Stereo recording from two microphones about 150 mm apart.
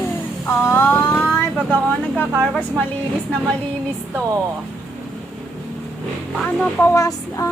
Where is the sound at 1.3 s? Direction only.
10° left (ahead or behind).